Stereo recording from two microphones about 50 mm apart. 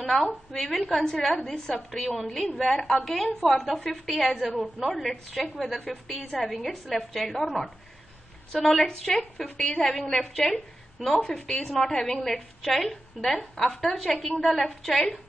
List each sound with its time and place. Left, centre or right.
0.0 s a woman's voice: centre
11.2 s a woman's voice: centre